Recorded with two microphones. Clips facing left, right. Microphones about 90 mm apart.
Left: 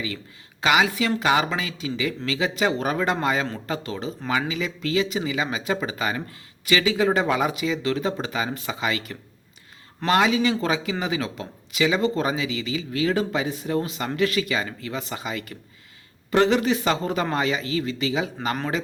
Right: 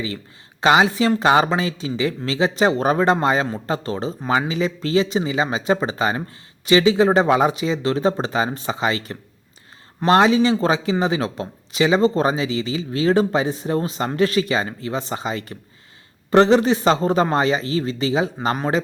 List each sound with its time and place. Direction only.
0.6 s speech: 30° right (ahead or behind)